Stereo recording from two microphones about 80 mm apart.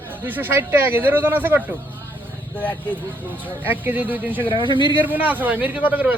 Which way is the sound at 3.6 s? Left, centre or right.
Right.